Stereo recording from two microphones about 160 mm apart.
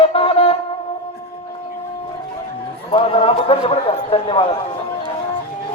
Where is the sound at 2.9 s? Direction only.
35° left (ahead or behind).